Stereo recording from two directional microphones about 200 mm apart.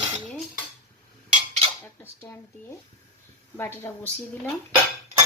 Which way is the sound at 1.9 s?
15° left (ahead or behind).